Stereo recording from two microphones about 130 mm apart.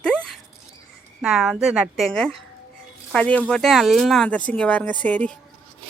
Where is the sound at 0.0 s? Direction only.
5° left (ahead or behind).